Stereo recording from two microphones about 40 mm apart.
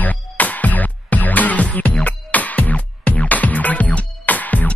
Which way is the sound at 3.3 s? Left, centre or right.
Left.